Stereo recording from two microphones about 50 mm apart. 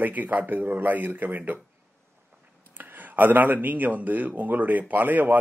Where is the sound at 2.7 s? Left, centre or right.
Right.